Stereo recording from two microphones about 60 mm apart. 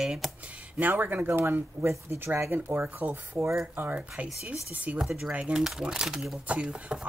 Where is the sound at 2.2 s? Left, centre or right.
Right.